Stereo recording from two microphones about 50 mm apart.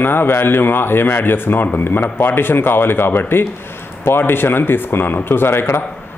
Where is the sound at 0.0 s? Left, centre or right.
Left.